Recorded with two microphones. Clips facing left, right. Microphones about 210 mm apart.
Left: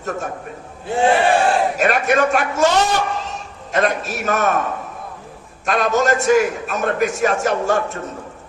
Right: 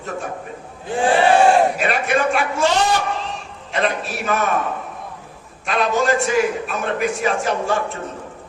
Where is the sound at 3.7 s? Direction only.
45° left (ahead or behind).